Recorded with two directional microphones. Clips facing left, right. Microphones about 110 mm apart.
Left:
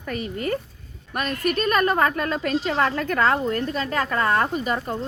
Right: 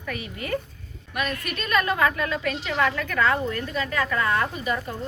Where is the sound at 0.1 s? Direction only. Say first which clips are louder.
Left 3 dB; 40° left (ahead or behind).